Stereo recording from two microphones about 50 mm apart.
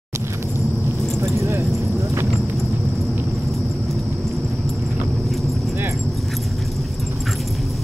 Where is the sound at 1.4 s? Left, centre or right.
Right.